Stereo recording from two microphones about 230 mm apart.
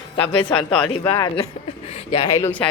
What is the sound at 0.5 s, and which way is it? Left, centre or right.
Speech, centre.